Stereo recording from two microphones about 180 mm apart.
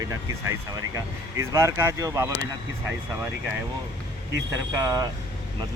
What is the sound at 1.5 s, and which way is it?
Speech, 15° right (ahead or behind).